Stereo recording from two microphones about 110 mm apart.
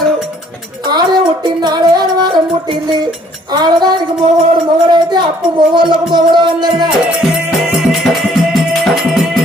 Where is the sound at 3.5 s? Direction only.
40° right (ahead or behind).